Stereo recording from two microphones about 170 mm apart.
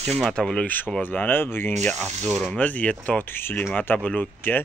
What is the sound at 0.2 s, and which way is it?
Speech, centre (ahead or behind).